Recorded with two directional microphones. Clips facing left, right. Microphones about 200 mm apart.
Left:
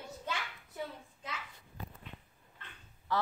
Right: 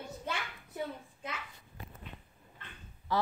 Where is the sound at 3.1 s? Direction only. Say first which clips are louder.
Right 2 dB; 10° right (ahead or behind).